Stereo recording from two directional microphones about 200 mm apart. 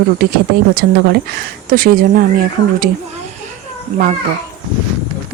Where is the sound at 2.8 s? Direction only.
35° right (ahead or behind).